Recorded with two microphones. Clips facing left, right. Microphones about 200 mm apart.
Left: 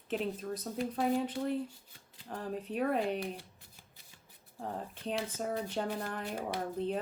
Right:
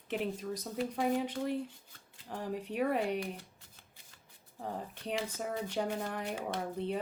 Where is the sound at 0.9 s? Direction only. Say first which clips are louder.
Left 1 dB; 10° right (ahead or behind).